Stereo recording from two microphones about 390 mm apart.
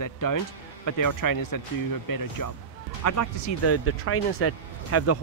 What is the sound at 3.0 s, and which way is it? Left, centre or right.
Speech, left.